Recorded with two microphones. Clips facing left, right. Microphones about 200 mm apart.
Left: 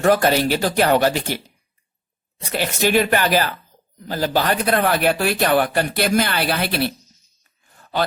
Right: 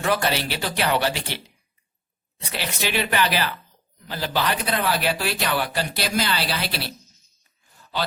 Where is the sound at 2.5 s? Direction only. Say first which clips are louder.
Left 8 dB; 45° left (ahead or behind).